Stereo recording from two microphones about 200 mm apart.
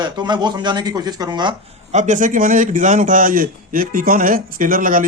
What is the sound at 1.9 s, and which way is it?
A man's voice, 40° right (ahead or behind).